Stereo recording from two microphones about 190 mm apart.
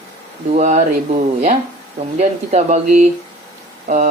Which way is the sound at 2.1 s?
40° right (ahead or behind).